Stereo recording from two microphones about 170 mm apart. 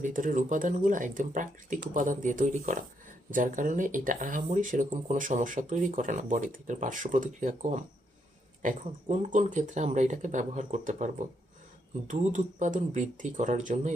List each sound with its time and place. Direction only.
0.0 s speech: 50° right (ahead or behind)